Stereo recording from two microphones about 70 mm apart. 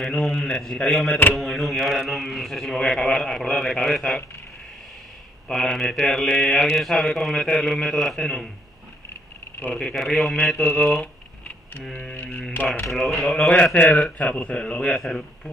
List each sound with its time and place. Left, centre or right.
0.0 s speech: centre
5.5 s mantra: centre
9.8 s speech: centre
10.4 s mantra: centre
11.0 s a sound: centre
12.3 s mantra: centre
12.8 s speech: centre
14.1 s mantra: left